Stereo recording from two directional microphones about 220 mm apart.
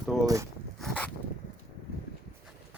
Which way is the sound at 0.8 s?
5° left (ahead or behind).